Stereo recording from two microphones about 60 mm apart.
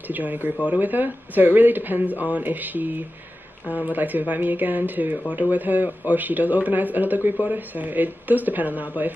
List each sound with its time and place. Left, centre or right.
0.1 s a man's voice: right